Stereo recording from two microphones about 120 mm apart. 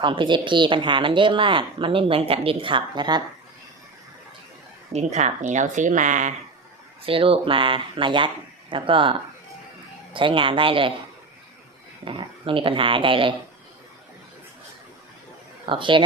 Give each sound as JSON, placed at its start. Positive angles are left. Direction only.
{"t": 0.0, "sound": "speech", "side_deg": -40}
{"t": 4.9, "sound": "speech", "side_deg": -65}
{"t": 7.0, "sound": "speech", "side_deg": -50}
{"t": 12.0, "sound": "speech", "side_deg": -45}
{"t": 15.6, "sound": "speech", "side_deg": -45}